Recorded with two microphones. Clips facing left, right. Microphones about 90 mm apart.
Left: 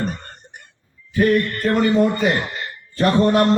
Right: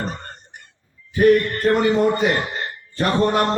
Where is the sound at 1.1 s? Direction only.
20° right (ahead or behind).